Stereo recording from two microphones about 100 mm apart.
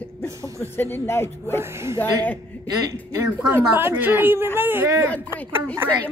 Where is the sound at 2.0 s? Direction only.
15° left (ahead or behind).